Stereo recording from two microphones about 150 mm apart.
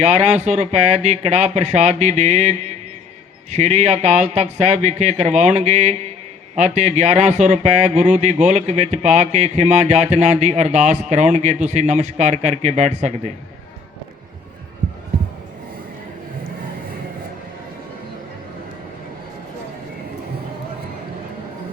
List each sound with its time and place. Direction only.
0.0 s speech: 50° right (ahead or behind)